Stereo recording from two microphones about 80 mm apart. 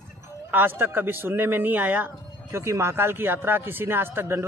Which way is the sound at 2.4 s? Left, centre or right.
Right.